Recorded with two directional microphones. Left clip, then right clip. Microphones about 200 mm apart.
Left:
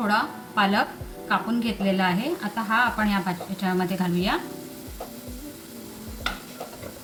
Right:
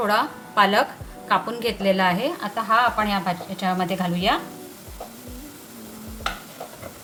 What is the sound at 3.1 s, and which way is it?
Speech, 50° right (ahead or behind).